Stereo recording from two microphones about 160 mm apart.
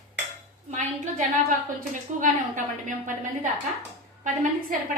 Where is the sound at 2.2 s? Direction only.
55° right (ahead or behind).